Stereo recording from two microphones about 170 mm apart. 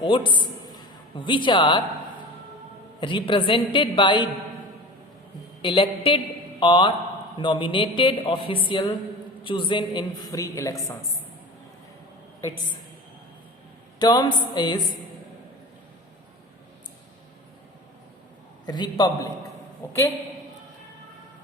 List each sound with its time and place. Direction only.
0.0 s a man's voice: 30° left (ahead or behind)
3.0 s a woman's voice: 30° left (ahead or behind)
5.6 s a woman's voice: 30° left (ahead or behind)
14.0 s a woman's voice: 25° left (ahead or behind)
18.6 s a woman's voice: 25° left (ahead or behind)